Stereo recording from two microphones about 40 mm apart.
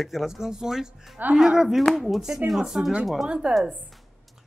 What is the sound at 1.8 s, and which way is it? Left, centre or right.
Speech, centre.